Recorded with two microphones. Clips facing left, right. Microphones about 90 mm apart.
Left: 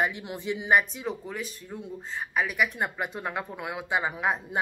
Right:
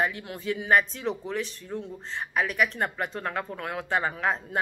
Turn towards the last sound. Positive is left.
turn(degrees=15)  # may be behind; listen again after turning